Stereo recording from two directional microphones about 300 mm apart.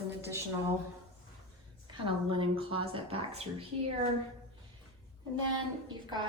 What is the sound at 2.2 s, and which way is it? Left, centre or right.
A woman's voice, centre.